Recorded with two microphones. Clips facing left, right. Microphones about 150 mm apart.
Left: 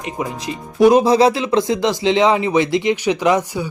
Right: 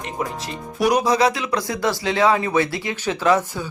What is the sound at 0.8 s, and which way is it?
Speech, 25° left (ahead or behind).